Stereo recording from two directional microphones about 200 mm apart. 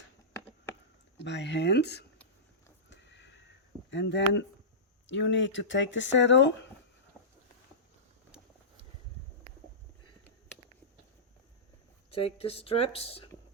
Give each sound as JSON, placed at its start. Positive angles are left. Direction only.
{"t": 1.2, "sound": "speech", "side_deg": 60}
{"t": 2.9, "sound": "sniff", "side_deg": 65}
{"t": 3.8, "sound": "speech", "side_deg": 65}
{"t": 12.1, "sound": "speech", "side_deg": 30}